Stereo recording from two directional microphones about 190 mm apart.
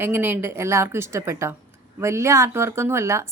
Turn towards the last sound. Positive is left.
turn(degrees=-15)  # may be behind; listen again after turning